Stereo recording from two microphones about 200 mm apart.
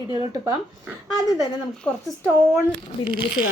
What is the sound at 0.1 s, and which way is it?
Speech, 25° right (ahead or behind).